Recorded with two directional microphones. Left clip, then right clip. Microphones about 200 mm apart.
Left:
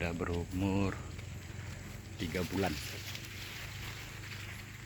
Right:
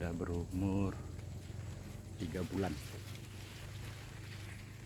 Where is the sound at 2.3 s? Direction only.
25° left (ahead or behind).